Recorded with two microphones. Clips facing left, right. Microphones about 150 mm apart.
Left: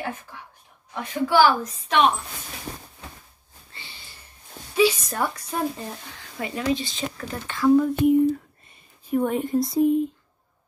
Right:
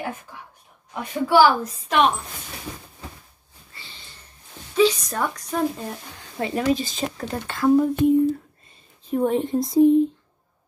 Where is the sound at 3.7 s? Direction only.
15° left (ahead or behind).